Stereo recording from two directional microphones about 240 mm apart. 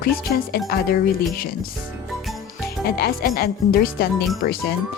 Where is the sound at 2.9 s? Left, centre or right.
Left.